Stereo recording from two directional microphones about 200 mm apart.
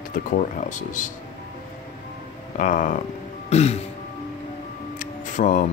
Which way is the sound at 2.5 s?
40° left (ahead or behind).